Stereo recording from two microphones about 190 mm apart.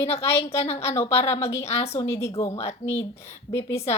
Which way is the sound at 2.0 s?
15° left (ahead or behind).